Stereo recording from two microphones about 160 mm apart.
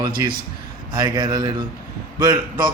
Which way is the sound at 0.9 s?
25° right (ahead or behind).